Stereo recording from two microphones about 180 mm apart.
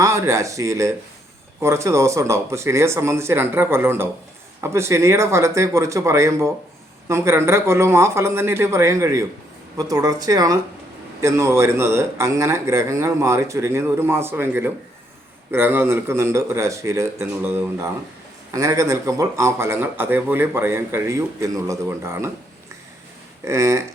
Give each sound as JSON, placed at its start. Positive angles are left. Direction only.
{"t": 0.0, "sound": "speech", "side_deg": -15}
{"t": 23.5, "sound": "speech", "side_deg": -15}